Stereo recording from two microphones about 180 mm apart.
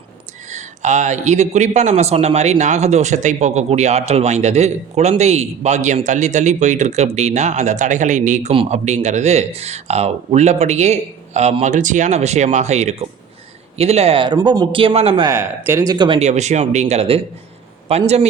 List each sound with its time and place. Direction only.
0.5 s speech: 40° right (ahead or behind)
15.3 s speech: 15° right (ahead or behind)
16.2 s speech: 40° right (ahead or behind)